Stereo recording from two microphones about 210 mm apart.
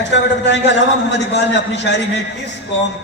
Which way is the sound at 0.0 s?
55° left (ahead or behind).